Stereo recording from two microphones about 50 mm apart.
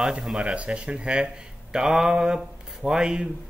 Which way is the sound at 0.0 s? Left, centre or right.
Centre.